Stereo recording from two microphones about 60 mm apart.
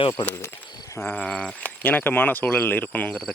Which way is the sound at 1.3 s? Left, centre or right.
Centre.